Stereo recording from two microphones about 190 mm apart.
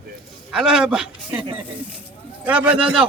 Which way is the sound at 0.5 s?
5° right (ahead or behind).